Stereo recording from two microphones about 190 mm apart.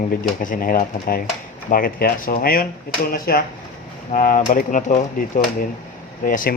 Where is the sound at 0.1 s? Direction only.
45° left (ahead or behind).